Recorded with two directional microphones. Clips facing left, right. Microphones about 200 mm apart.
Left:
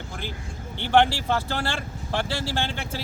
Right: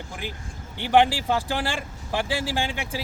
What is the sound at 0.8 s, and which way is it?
A man's voice, 10° right (ahead or behind).